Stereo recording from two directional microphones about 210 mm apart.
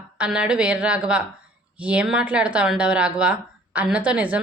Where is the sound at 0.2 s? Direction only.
5° right (ahead or behind).